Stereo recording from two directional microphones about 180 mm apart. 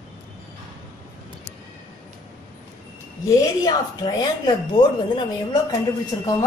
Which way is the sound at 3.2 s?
20° left (ahead or behind).